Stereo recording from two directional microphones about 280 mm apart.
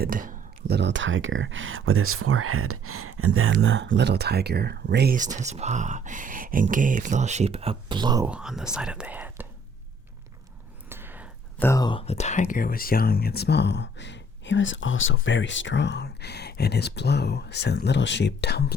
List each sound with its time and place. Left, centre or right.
0.0 s speech: right; by 9.5 s centre
10.8 s a sound: centre
11.5 s speech: centre; by 18.6 s left